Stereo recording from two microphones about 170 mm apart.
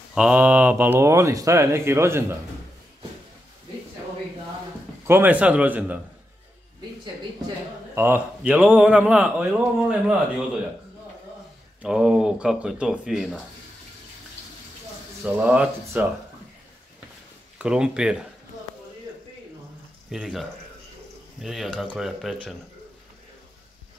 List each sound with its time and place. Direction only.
0.1 s speech: 5° right (ahead or behind)
5.0 s speech: 10° right (ahead or behind)
7.9 s speech: 10° right (ahead or behind)
11.8 s speech: 5° right (ahead or behind)
15.3 s speech: 10° right (ahead or behind)
17.6 s speech: 5° right (ahead or behind)
20.1 s speech: centre (ahead or behind)